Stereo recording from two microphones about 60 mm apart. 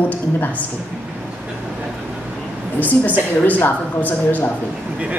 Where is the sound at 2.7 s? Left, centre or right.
Left.